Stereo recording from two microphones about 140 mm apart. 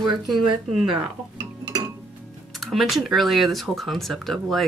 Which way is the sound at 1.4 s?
25° right (ahead or behind).